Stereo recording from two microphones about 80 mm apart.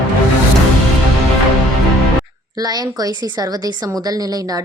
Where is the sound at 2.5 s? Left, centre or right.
Right.